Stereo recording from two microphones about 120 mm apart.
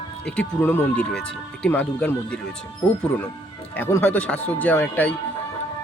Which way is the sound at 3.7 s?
20° left (ahead or behind).